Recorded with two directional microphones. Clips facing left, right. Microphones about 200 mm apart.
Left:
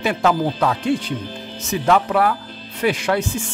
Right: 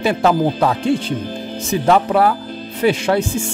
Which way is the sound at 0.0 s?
30° right (ahead or behind).